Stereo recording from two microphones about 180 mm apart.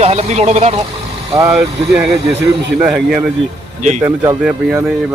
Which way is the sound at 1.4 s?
15° right (ahead or behind).